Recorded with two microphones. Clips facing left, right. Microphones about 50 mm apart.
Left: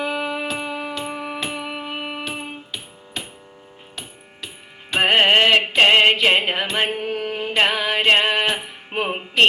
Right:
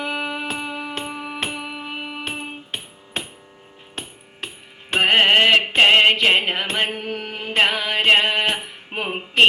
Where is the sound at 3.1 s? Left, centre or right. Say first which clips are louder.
Right 3 dB; right.